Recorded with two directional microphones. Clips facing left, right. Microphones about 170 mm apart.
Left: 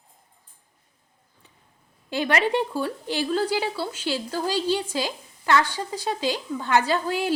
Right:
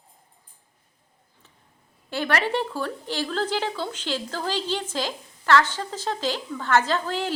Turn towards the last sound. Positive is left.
turn(degrees=10)  # may be behind; listen again after turning